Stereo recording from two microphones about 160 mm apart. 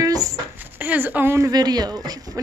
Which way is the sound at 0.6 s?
10° right (ahead or behind).